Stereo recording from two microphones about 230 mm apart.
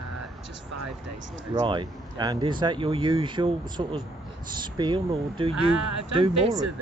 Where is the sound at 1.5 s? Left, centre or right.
Centre.